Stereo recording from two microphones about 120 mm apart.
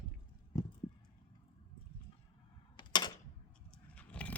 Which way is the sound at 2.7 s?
40° left (ahead or behind).